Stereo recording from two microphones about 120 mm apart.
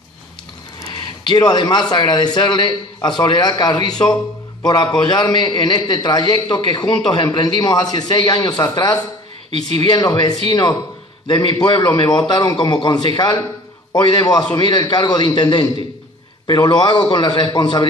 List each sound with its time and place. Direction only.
0.8 s a man's voice: 40° left (ahead or behind)